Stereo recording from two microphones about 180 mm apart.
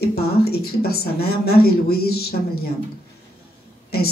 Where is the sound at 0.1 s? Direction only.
60° left (ahead or behind).